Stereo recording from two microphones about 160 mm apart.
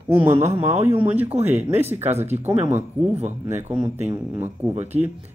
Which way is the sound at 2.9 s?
35° right (ahead or behind).